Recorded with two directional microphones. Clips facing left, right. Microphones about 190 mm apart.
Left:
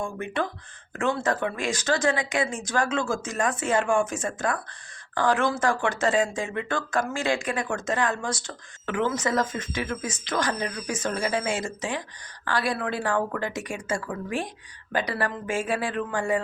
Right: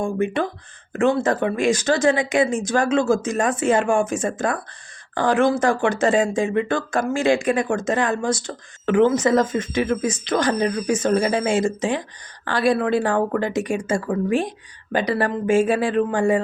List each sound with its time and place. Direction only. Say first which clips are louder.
0.0 s speech: right 7 dB; 20° right (ahead or behind)